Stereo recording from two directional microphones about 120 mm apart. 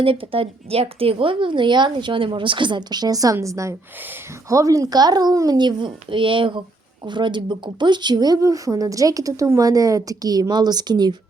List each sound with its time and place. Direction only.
0.0 s speech: 50° right (ahead or behind)